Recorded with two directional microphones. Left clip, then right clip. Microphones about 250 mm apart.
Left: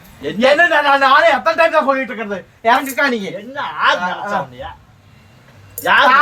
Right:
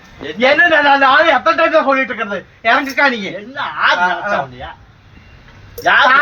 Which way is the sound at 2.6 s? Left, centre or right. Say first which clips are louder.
Right 2 dB; centre.